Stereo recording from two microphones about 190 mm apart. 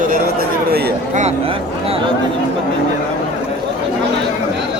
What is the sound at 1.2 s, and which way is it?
Speech, 30° right (ahead or behind).